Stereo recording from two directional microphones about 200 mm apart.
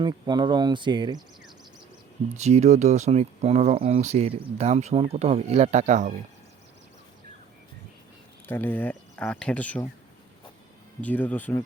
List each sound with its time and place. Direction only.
0.0 s speech: 20° right (ahead or behind)
2.4 s speech: 35° right (ahead or behind)
8.4 s speech: 10° left (ahead or behind)
11.0 s speech: 10° left (ahead or behind)